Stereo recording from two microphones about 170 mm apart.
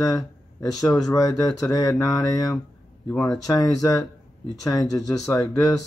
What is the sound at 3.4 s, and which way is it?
Speech, 20° left (ahead or behind).